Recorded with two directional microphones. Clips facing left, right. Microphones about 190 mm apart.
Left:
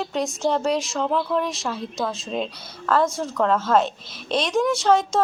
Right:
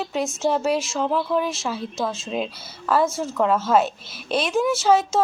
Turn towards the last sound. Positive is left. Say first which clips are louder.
# right 1 dB
turn(degrees=-5)  # may be behind; listen again after turning